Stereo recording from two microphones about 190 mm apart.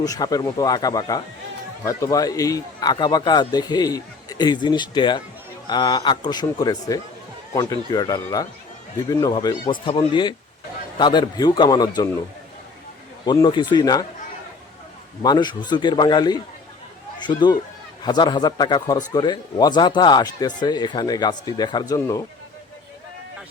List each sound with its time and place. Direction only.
0.0 s a man's voice: 20° left (ahead or behind)
13.2 s a man's voice: 20° left (ahead or behind)
15.2 s a man's voice: 20° left (ahead or behind)